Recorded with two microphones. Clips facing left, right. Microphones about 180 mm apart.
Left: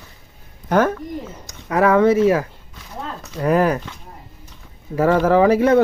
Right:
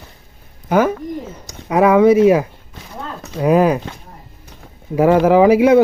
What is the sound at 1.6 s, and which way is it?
Speech, 15° right (ahead or behind).